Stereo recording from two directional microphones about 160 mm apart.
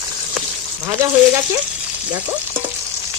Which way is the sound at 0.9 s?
15° right (ahead or behind).